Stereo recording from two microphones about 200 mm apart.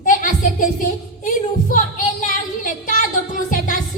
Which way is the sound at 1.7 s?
40° left (ahead or behind).